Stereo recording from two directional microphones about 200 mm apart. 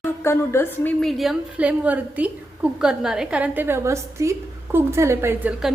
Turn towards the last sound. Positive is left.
turn(degrees=-10)  # may be behind; listen again after turning